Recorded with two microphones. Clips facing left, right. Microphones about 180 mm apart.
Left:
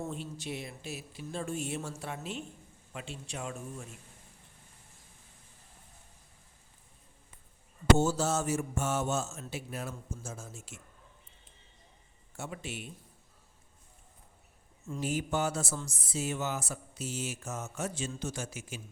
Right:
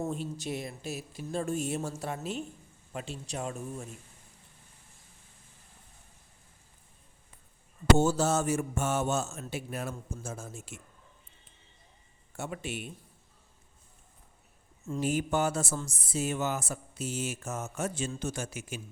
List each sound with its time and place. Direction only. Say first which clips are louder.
0.0 s speech: right 4 dB; 40° right (ahead or behind)
7.9 s speech: right 3 dB; 55° right (ahead or behind)
12.4 s speech: right 4 dB; 60° right (ahead or behind)
14.9 s speech: right 3 dB; 55° right (ahead or behind)